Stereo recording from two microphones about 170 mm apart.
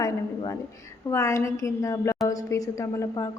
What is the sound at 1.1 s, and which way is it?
A woman's voice, 20° left (ahead or behind).